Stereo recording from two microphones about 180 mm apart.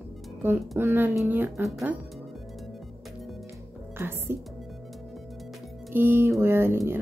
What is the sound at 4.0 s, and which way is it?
Speech, 15° right (ahead or behind).